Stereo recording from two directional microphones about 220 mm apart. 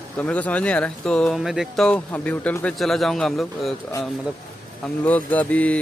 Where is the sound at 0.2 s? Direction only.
5° left (ahead or behind).